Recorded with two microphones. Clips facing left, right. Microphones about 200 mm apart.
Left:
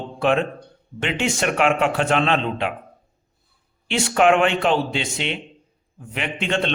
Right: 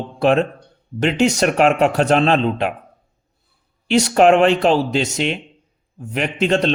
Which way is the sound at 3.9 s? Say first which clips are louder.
Right 5 dB; 40° right (ahead or behind).